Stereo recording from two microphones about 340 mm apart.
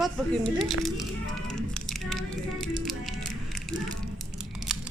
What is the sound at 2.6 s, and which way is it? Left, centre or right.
Music, centre.